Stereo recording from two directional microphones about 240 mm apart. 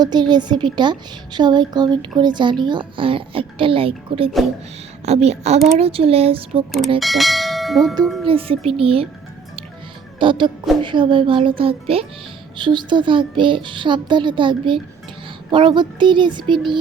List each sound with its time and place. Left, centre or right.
0.0 s a woman's voice: centre
7.0 s church bell: centre
8.0 s speech: centre
8.3 s a woman's voice: right
10.2 s a woman's voice: centre